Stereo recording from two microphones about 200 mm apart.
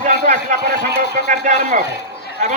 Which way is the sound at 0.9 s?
40° right (ahead or behind).